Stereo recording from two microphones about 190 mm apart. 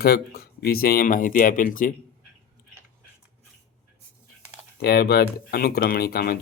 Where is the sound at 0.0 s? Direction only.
55° left (ahead or behind).